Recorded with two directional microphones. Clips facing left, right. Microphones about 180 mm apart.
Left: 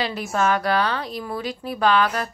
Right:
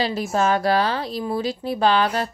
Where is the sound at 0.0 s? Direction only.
35° right (ahead or behind).